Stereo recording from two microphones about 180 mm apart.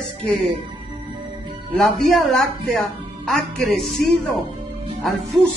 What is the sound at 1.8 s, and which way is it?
Speech, centre (ahead or behind).